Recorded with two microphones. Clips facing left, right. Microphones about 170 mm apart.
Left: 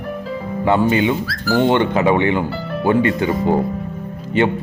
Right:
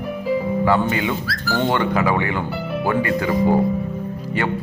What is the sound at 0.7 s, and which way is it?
Speech, 25° left (ahead or behind).